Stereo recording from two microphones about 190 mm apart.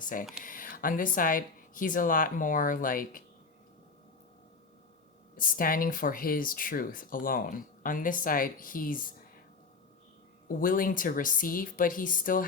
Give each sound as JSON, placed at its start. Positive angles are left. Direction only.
{"t": 0.0, "sound": "speech", "side_deg": 45}
{"t": 5.4, "sound": "speech", "side_deg": 45}
{"t": 10.6, "sound": "speech", "side_deg": 45}